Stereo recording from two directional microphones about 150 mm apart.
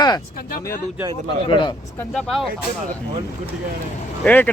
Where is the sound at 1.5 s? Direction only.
30° left (ahead or behind).